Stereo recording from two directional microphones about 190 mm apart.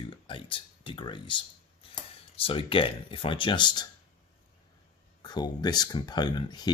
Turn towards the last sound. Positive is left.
turn(degrees=20)  # may be behind; listen again after turning